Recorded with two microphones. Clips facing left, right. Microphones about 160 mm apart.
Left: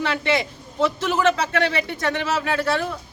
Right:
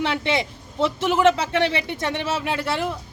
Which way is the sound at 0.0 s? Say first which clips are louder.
Left 1 dB; 25° right (ahead or behind).